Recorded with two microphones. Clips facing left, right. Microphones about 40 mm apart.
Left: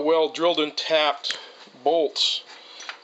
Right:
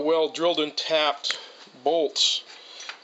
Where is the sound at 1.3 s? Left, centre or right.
Centre.